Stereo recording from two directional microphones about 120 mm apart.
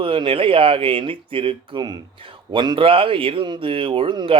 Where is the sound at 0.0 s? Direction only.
45° right (ahead or behind).